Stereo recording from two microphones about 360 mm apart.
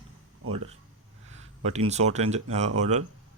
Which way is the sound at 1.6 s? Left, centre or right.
Centre.